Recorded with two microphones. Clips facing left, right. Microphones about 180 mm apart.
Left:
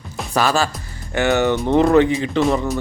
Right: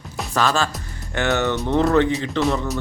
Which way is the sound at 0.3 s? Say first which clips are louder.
Left 2 dB; 10° left (ahead or behind).